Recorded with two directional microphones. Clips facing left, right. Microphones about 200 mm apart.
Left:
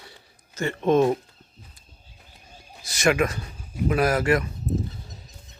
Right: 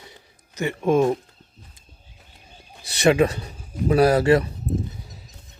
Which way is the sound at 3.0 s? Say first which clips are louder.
Right 4 dB; 30° right (ahead or behind).